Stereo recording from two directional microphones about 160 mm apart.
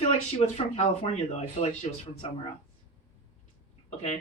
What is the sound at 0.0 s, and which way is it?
Speech, 35° left (ahead or behind).